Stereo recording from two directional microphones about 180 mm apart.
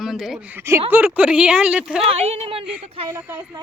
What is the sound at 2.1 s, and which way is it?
Speech, 35° right (ahead or behind).